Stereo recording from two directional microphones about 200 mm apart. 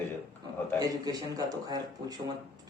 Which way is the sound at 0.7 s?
20° right (ahead or behind).